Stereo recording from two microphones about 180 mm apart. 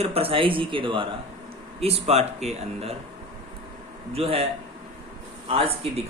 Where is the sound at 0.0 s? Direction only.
30° right (ahead or behind).